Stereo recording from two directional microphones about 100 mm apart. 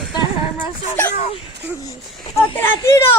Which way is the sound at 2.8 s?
25° left (ahead or behind).